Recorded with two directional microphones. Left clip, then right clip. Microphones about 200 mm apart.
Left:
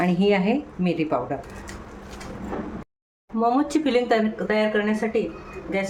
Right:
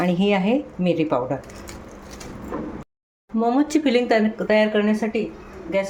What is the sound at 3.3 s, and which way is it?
Speech, 10° right (ahead or behind).